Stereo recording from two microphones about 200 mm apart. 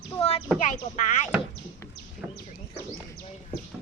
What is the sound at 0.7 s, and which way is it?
Speech, 40° left (ahead or behind).